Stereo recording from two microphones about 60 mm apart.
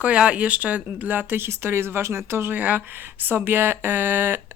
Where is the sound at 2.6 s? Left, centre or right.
Right.